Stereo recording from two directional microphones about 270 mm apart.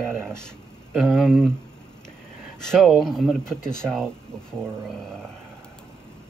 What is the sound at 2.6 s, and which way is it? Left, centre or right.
Speech, centre.